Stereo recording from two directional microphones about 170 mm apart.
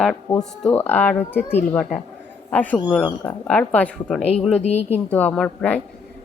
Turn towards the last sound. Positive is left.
turn(degrees=5)  # may be behind; listen again after turning